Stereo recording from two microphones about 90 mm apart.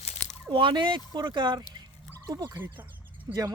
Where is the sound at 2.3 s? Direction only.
40° right (ahead or behind).